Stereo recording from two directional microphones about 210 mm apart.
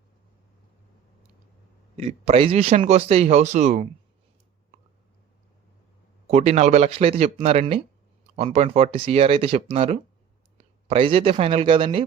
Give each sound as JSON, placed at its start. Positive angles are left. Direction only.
{"t": 2.0, "sound": "speech", "side_deg": -30}
{"t": 6.2, "sound": "speech", "side_deg": -30}